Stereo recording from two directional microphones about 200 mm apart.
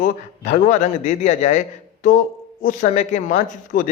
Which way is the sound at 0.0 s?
40° left (ahead or behind).